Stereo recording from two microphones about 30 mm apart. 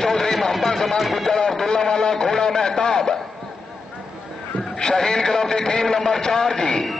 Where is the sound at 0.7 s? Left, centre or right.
Centre.